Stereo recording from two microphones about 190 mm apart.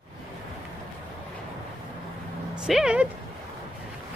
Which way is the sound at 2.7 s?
5° right (ahead or behind).